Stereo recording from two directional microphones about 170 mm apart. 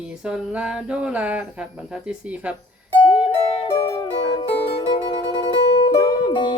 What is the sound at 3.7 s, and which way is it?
Music, 20° left (ahead or behind).